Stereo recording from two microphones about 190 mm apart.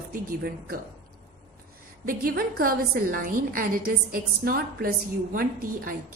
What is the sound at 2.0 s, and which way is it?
A woman's voice, 50° right (ahead or behind).